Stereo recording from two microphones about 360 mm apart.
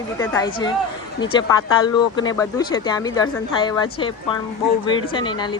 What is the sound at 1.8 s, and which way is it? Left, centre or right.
Speech, centre.